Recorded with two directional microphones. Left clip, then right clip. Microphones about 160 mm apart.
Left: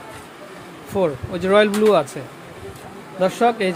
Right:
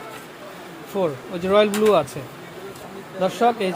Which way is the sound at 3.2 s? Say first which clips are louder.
Left 2 dB; 30° left (ahead or behind).